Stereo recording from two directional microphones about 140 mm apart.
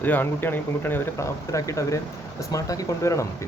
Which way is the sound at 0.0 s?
15° left (ahead or behind).